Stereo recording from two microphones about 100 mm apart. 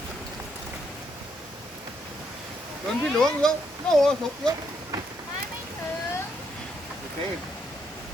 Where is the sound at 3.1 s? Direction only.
5° left (ahead or behind).